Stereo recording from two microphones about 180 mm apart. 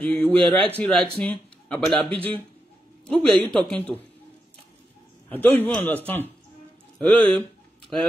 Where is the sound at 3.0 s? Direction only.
5° left (ahead or behind).